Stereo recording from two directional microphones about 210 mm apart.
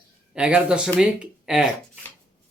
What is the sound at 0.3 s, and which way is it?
Speech, 5° right (ahead or behind).